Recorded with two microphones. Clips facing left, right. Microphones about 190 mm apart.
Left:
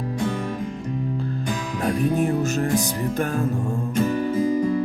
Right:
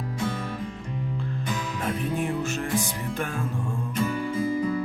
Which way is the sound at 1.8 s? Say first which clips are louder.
Left 8 dB; 40° left (ahead or behind).